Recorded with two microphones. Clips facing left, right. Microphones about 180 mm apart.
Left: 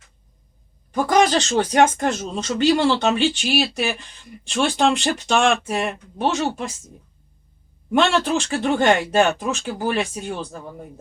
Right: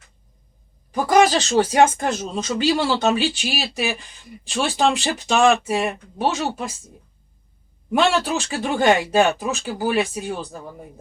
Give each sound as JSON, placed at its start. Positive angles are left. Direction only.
{"t": 0.9, "sound": "speech", "side_deg": -5}
{"t": 7.9, "sound": "speech", "side_deg": 0}